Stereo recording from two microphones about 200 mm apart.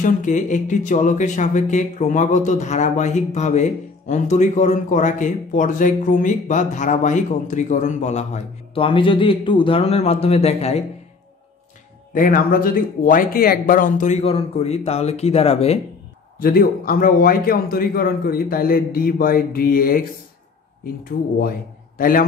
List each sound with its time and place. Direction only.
0.0 s speech: 40° left (ahead or behind)
12.1 s speech: 45° left (ahead or behind)
16.3 s a man's voice: 45° left (ahead or behind)